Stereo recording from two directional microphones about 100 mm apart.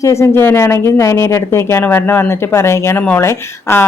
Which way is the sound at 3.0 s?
15° left (ahead or behind).